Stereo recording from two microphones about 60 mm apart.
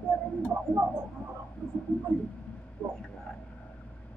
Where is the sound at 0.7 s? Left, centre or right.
Centre.